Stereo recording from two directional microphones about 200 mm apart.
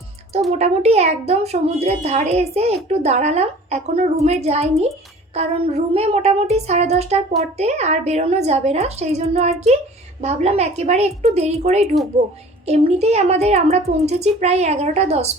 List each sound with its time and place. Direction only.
0.6 s a woman's voice: 30° right (ahead or behind)